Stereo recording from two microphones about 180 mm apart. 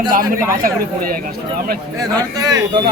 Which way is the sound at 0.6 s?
50° right (ahead or behind).